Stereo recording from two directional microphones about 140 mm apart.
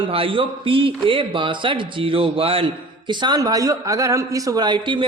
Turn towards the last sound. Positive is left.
turn(degrees=-35)  # may be behind; listen again after turning